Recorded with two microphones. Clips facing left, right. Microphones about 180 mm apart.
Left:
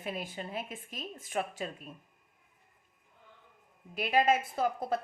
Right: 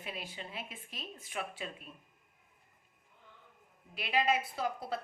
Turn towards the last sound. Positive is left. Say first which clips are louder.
# left 5 dB
turn(degrees=45)  # may be behind; listen again after turning